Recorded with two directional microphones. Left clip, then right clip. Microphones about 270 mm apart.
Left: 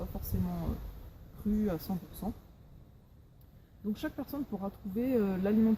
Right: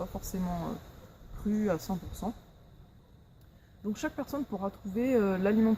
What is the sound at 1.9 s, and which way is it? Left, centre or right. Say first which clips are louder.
Speech: right 3 dB; centre.